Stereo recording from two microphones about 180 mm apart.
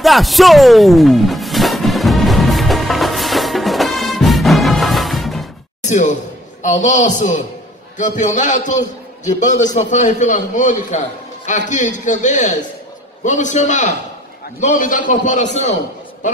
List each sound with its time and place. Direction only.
0.0 s music: centre (ahead or behind)
5.8 s a sound: 40° left (ahead or behind)
6.6 s a man's voice: 40° left (ahead or behind)